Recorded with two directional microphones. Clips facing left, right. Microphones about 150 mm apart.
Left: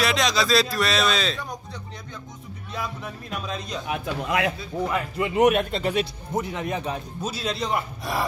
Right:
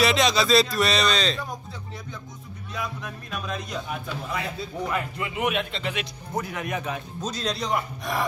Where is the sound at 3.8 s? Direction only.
80° left.